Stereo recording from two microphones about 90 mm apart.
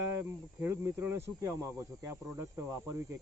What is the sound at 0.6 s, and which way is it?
Speech, 35° right (ahead or behind).